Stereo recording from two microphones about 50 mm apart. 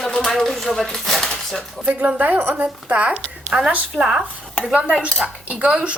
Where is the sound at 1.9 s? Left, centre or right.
Right.